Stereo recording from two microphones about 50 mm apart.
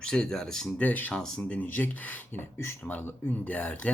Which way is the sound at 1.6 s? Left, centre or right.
Left.